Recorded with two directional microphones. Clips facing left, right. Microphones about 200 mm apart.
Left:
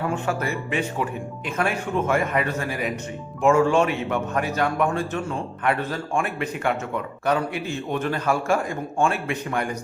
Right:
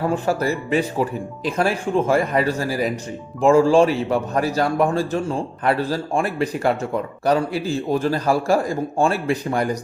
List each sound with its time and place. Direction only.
0.0 s a man's voice: 35° right (ahead or behind)